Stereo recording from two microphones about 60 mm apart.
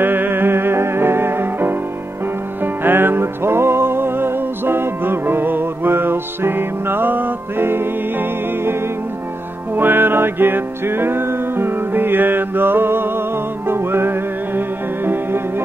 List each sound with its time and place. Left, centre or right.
0.0 s music: right
9.8 s music: right